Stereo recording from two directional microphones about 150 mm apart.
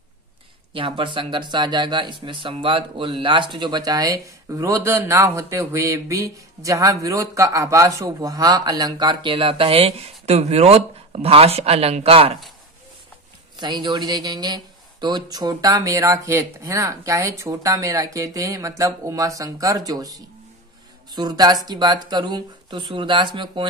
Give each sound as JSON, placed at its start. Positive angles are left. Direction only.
{"t": 0.7, "sound": "speech", "side_deg": -35}
{"t": 13.6, "sound": "speech", "side_deg": -30}